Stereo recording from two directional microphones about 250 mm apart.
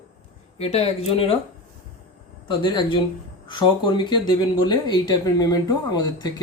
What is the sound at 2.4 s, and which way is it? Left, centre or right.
Speech, centre.